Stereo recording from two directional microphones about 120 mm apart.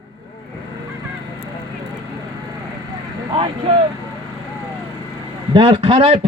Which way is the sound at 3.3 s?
45° right (ahead or behind).